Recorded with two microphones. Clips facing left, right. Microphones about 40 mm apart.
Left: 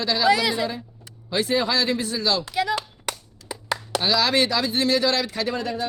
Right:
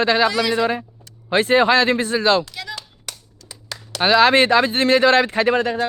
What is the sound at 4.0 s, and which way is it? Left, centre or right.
Speech, right.